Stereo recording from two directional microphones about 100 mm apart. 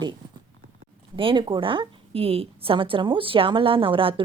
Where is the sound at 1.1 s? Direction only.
60° right (ahead or behind).